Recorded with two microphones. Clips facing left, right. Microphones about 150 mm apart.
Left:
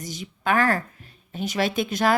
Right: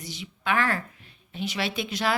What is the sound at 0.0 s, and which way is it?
A woman's voice, 45° left (ahead or behind).